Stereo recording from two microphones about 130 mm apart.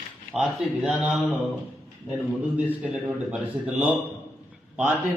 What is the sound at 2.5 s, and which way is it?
A man's voice, 10° right (ahead or behind).